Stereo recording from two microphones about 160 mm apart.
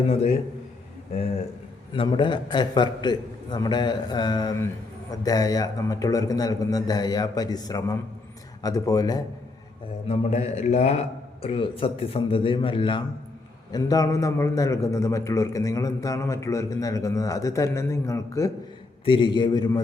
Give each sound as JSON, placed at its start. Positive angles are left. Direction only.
{"t": 1.9, "sound": "a man's voice", "side_deg": 30}
{"t": 10.1, "sound": "a man's voice", "side_deg": 40}
{"t": 19.0, "sound": "a man's voice", "side_deg": 30}